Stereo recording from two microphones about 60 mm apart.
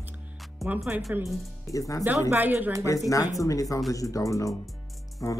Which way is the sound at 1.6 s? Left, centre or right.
Left.